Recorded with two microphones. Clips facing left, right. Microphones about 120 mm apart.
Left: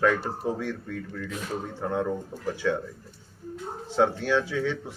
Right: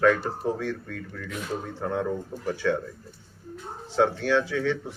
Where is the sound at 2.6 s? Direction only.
5° left (ahead or behind).